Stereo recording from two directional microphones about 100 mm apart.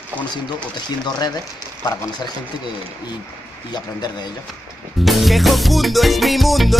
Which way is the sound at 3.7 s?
45° left (ahead or behind).